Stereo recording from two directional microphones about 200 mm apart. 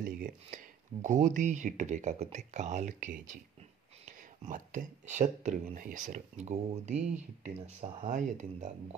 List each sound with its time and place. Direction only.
0.0 s speech: 45° right (ahead or behind)